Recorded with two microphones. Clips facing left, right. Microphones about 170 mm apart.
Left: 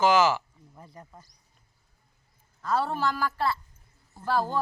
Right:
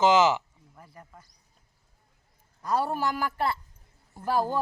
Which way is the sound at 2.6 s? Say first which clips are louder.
Even; 15° right (ahead or behind).